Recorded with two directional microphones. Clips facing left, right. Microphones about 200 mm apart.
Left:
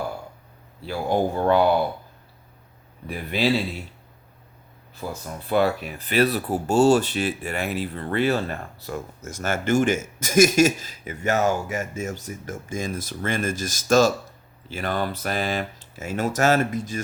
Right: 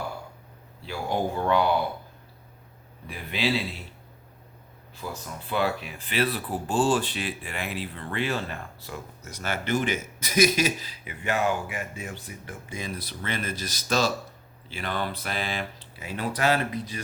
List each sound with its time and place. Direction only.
0.9 s speech: 45° left (ahead or behind)
5.0 s speech: 45° left (ahead or behind)